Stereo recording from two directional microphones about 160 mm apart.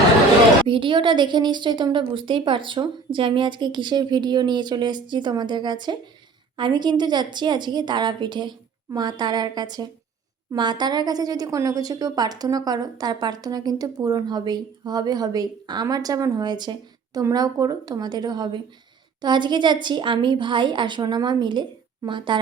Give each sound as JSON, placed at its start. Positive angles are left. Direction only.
{"t": 0.7, "sound": "a woman's voice", "side_deg": -30}